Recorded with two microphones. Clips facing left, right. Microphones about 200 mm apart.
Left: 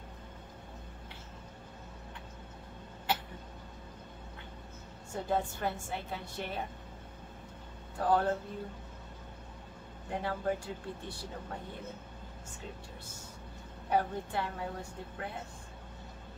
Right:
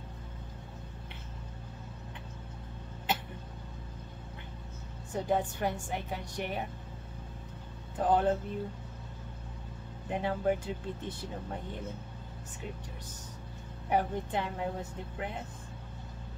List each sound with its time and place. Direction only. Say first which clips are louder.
5.1 s a woman's voice: right 2 dB; 15° right (ahead or behind)
8.0 s speech: right 2 dB; 20° right (ahead or behind)
10.0 s speech: right 4 dB; 20° right (ahead or behind)
13.8 s a woman's voice: right 1 dB; 15° right (ahead or behind)